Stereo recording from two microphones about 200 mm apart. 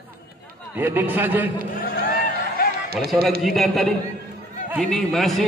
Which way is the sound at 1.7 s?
50° left (ahead or behind).